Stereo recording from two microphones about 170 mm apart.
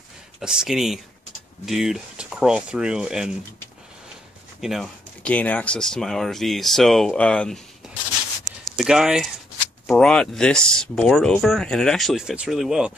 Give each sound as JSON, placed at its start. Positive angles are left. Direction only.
{"t": 0.4, "sound": "speech", "side_deg": -5}
{"t": 4.6, "sound": "speech", "side_deg": 0}